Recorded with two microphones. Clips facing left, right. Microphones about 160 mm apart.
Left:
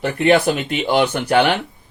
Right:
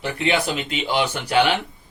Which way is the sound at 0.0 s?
55° left (ahead or behind).